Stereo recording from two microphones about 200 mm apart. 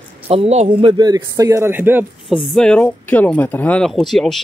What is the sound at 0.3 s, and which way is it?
Speech, 30° right (ahead or behind).